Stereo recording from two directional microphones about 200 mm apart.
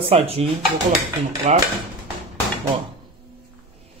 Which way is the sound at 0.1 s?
30° right (ahead or behind).